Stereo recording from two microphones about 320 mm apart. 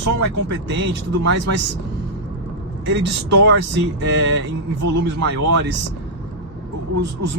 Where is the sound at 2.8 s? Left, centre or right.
Right.